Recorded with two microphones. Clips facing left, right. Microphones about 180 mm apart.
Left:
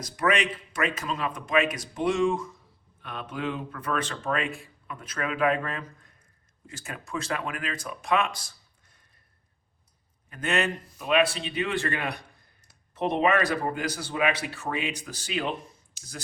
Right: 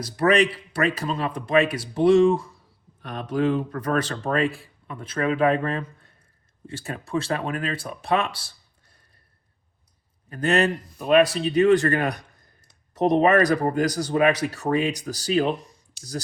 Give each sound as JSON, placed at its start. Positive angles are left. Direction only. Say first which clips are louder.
{"t": 0.0, "sound": "speech", "louder": "right 6 dB", "side_deg": -35}
{"t": 10.2, "sound": "speech", "louder": "right 6 dB", "side_deg": -35}